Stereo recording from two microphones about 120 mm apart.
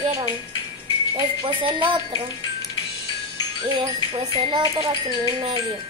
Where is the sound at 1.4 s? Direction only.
45° right (ahead or behind).